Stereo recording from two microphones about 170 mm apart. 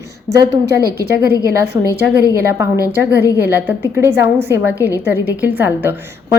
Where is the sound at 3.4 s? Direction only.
10° right (ahead or behind).